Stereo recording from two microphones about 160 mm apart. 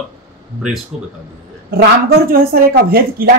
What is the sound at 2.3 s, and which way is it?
Speech, 65° right (ahead or behind).